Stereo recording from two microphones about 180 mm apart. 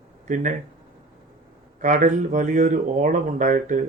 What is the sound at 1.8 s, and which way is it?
Speech, 45° right (ahead or behind).